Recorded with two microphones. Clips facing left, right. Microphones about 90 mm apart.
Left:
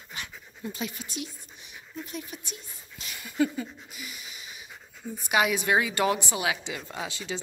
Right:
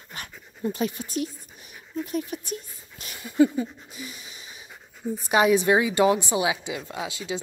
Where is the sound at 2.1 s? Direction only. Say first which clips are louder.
Right 9 dB; 45° right (ahead or behind).